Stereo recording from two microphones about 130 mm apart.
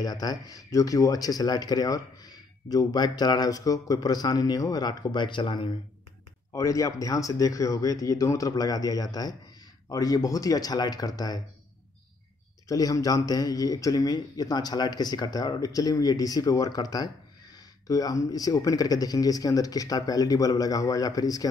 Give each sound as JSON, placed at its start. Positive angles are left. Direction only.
{"t": 0.0, "sound": "speech", "side_deg": 30}
{"t": 6.5, "sound": "speech", "side_deg": 25}
{"t": 12.6, "sound": "speech", "side_deg": 25}